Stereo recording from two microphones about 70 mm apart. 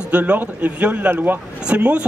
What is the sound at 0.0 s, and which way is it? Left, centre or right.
Speech, centre.